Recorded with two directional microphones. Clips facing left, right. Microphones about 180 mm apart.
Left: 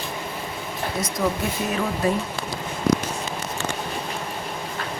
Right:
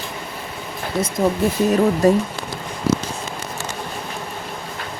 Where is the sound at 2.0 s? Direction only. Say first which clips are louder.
Right 7 dB; 40° right (ahead or behind).